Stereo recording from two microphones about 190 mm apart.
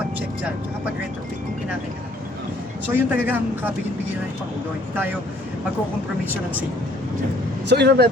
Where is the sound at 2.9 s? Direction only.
10° right (ahead or behind).